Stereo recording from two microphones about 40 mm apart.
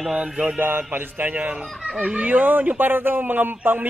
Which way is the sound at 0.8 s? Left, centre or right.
Right.